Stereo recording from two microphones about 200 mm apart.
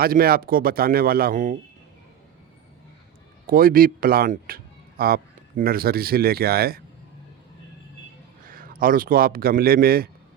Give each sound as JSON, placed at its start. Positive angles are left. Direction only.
{"t": 0.0, "sound": "speech", "side_deg": -50}
{"t": 3.4, "sound": "speech", "side_deg": -45}
{"t": 8.4, "sound": "a man's voice", "side_deg": -45}